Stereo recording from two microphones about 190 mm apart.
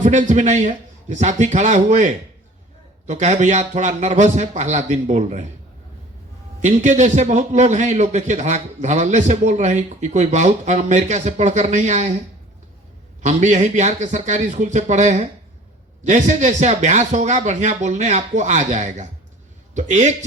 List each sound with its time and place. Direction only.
0.0 s a man's voice: 40° right (ahead or behind)
6.6 s a man's voice: 40° right (ahead or behind)
13.2 s a man's voice: 40° right (ahead or behind)